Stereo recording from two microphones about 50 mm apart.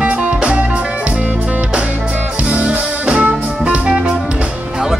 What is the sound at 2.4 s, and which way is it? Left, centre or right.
Music, right.